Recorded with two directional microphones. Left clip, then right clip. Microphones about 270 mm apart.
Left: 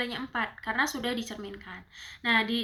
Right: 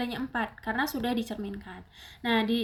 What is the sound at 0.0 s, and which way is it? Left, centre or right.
Speech, right.